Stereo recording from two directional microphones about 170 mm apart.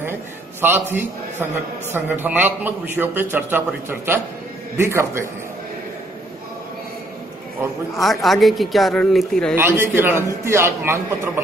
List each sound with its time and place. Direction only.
0.6 s a man's voice: 15° right (ahead or behind)
7.9 s speech: centre (ahead or behind)
9.6 s a man's voice: 15° right (ahead or behind)